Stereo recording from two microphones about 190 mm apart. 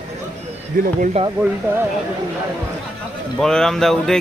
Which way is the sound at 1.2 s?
30° right (ahead or behind).